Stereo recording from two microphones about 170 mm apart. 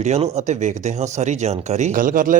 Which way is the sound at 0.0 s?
40° right (ahead or behind).